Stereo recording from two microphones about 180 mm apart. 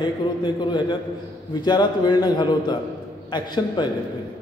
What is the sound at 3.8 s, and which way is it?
Speech, 25° left (ahead or behind).